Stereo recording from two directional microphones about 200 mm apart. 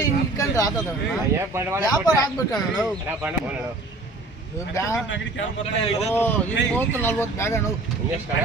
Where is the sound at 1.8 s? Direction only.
20° left (ahead or behind).